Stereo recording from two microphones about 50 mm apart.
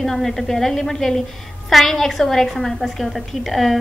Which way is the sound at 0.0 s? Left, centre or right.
Centre.